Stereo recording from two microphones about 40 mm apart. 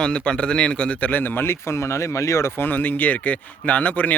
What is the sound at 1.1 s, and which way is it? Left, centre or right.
Speech, left.